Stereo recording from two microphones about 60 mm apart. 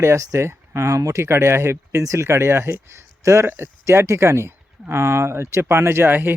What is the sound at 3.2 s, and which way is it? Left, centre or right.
Speech, right.